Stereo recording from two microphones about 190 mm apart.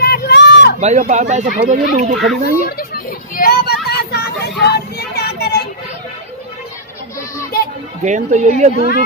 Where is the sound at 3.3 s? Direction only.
50° left (ahead or behind).